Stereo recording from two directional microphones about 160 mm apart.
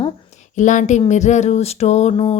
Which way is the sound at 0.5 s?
50° left (ahead or behind).